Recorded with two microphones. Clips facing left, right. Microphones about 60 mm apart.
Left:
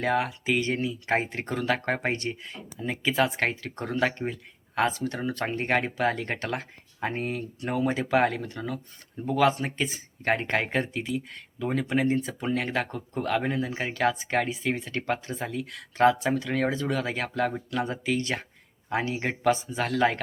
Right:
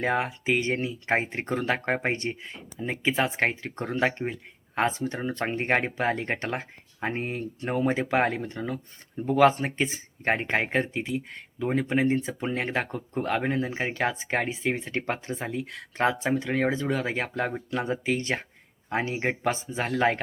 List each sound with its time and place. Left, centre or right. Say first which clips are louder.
0.0 s speech: even; right